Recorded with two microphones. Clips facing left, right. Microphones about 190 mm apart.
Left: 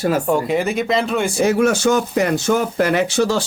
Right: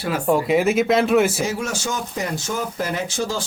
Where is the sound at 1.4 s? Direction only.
60° left (ahead or behind).